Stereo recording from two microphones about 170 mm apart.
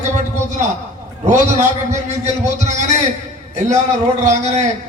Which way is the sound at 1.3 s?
45° right (ahead or behind).